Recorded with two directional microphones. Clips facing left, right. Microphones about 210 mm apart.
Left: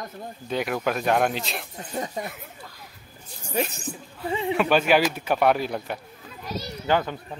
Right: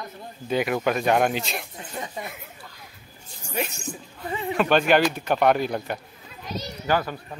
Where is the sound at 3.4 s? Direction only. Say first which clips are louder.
Left 3 dB; 35° left (ahead or behind).